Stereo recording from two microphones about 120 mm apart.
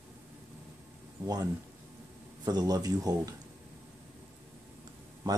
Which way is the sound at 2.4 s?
30° right (ahead or behind).